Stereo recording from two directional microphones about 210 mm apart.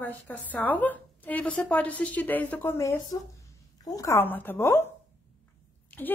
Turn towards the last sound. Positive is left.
turn(degrees=5)  # may be behind; listen again after turning